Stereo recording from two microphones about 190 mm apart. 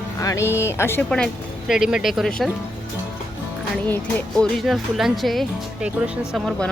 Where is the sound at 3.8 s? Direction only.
10° left (ahead or behind).